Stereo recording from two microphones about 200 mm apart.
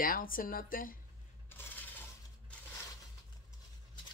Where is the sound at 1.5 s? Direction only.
10° left (ahead or behind).